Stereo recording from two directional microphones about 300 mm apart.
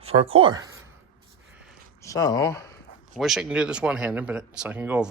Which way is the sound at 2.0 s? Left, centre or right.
Centre.